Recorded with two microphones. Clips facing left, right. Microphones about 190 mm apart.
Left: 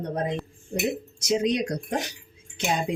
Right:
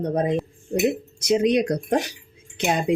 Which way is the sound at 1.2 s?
60° right (ahead or behind).